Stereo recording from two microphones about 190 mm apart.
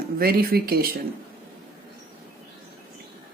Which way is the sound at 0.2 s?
50° right (ahead or behind).